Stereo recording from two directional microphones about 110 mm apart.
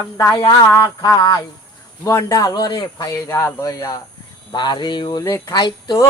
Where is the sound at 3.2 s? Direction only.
25° left (ahead or behind).